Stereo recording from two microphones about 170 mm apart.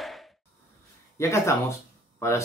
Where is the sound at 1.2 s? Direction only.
15° left (ahead or behind).